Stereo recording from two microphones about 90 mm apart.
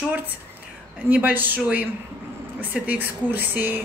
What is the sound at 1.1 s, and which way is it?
Speech, 20° right (ahead or behind).